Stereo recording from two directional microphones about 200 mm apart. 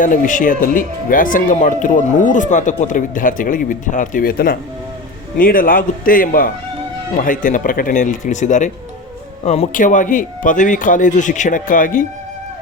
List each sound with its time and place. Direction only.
0.0 s a man's voice: 40° left (ahead or behind)